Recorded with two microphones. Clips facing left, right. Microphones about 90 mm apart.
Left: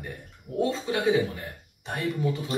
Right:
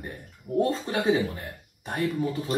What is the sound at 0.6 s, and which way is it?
Speech, 50° right (ahead or behind).